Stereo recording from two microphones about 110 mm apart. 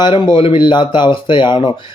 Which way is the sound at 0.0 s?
50° left (ahead or behind).